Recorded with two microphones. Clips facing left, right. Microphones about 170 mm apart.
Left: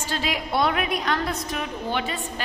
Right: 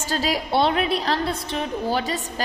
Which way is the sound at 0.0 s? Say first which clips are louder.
Right 3 dB; 40° right (ahead or behind).